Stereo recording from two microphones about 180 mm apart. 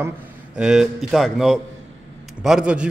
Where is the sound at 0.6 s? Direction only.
5° right (ahead or behind).